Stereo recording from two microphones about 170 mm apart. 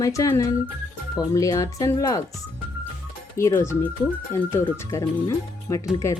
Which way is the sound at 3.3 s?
15° left (ahead or behind).